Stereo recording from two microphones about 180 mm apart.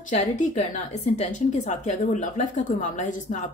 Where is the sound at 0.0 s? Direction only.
45° left (ahead or behind).